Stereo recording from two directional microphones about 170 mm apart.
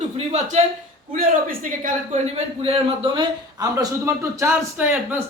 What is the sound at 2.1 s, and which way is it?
Speech, 40° right (ahead or behind).